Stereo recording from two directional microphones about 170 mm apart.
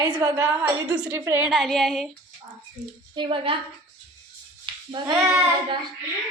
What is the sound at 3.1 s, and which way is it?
Speech, 30° right (ahead or behind).